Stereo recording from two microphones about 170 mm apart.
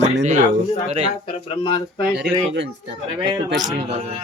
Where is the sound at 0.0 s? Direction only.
45° right (ahead or behind).